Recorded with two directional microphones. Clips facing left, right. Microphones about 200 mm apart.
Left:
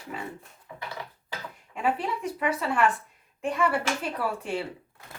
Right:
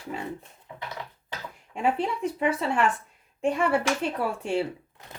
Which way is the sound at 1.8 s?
25° right (ahead or behind).